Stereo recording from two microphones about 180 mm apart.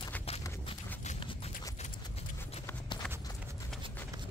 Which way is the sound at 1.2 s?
30° left (ahead or behind).